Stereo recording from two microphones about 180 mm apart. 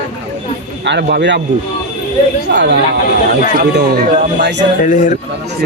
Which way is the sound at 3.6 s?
65° right (ahead or behind).